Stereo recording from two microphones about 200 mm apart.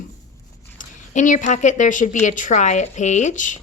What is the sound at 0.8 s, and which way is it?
A woman's voice, 40° left (ahead or behind).